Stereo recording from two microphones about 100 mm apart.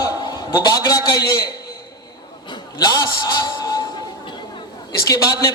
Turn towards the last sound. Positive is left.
turn(degrees=35)  # may be behind; listen again after turning